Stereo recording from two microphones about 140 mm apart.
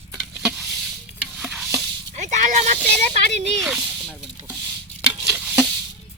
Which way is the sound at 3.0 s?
55° right (ahead or behind).